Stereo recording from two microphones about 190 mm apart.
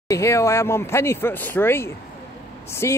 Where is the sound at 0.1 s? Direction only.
15° left (ahead or behind).